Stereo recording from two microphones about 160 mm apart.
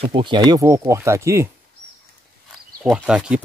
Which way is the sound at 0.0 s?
30° right (ahead or behind).